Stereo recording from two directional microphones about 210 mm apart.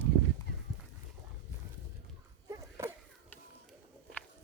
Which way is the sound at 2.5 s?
15° right (ahead or behind).